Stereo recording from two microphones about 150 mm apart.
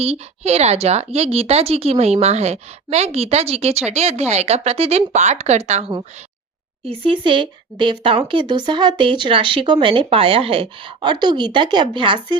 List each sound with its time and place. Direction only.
0.0 s a woman's voice: 45° right (ahead or behind)
6.8 s speech: 35° right (ahead or behind)